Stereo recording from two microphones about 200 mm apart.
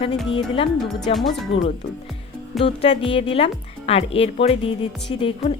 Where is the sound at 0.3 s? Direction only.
25° left (ahead or behind).